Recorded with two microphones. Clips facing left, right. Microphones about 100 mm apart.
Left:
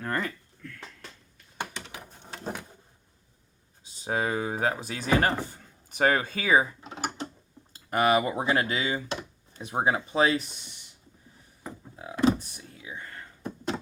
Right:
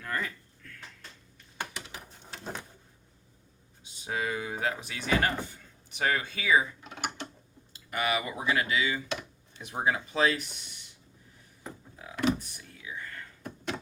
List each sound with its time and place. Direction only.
0.0 s speech: 40° left (ahead or behind)
3.9 s speech: 35° left (ahead or behind)
6.8 s a sound: 30° left (ahead or behind)
7.7 s speech: 40° left (ahead or behind)
11.6 s door: 25° left (ahead or behind)